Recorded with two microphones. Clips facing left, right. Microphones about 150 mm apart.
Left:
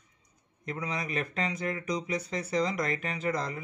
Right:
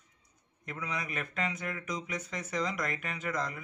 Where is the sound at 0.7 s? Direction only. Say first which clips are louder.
Left 4 dB; 35° left (ahead or behind).